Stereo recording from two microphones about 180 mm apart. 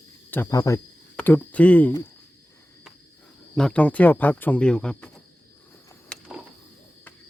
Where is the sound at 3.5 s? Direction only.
5° left (ahead or behind).